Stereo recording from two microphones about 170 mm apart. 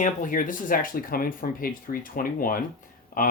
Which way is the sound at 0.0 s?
50° left (ahead or behind).